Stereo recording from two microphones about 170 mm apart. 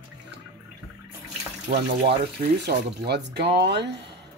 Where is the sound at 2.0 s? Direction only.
75° right (ahead or behind); by 4.0 s 90° right.